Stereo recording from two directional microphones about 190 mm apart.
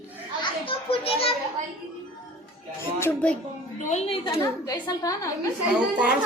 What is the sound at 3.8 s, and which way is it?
Speech, 35° left (ahead or behind).